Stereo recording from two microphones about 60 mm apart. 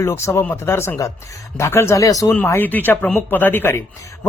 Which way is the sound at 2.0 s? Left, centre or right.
Left.